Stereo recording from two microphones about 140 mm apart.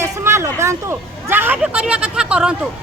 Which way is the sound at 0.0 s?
20° right (ahead or behind).